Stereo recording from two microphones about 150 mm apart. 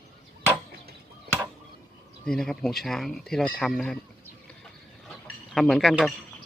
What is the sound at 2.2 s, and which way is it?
Speech, 5° left (ahead or behind).